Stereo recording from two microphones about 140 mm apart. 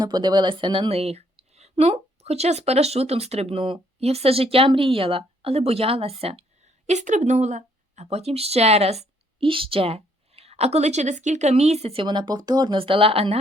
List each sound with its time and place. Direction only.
0.0 s speech: 30° right (ahead or behind)
6.8 s speech: 60° right (ahead or behind)
12.0 s speech: 30° right (ahead or behind)